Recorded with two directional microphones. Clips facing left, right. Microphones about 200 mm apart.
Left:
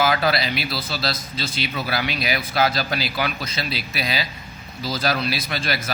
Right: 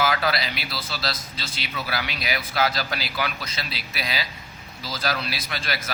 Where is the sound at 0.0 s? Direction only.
30° left (ahead or behind).